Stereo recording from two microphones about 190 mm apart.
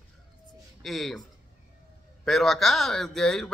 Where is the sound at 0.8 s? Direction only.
Centre (ahead or behind).